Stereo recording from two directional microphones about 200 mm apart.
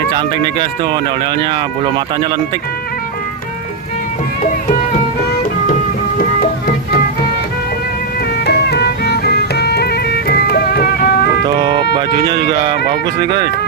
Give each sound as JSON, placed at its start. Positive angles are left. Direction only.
{"t": 0.1, "sound": "speech", "side_deg": -20}
{"t": 8.4, "sound": "music", "side_deg": 55}
{"t": 11.4, "sound": "speech", "side_deg": -25}